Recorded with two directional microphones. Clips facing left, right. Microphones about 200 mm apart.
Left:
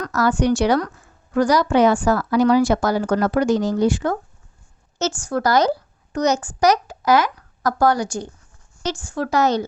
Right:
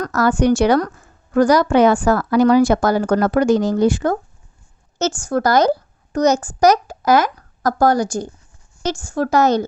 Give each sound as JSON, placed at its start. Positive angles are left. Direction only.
{"t": 0.0, "sound": "a woman's voice", "side_deg": -50}